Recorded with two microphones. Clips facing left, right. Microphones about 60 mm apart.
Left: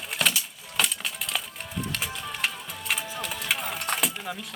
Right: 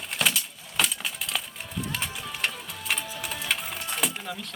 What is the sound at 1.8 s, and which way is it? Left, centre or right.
Music, centre.